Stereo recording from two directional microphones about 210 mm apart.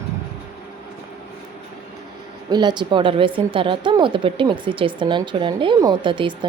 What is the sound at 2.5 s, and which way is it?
A woman's voice, 20° right (ahead or behind).